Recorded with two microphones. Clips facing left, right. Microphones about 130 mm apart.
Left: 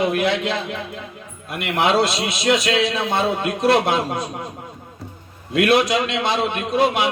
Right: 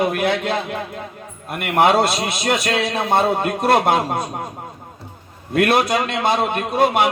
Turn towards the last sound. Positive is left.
turn(degrees=-50)  # may be behind; listen again after turning